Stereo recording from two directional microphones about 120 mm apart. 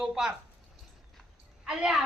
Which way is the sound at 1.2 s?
5° right (ahead or behind).